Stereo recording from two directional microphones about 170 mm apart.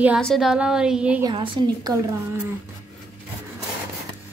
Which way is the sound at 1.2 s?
25° right (ahead or behind).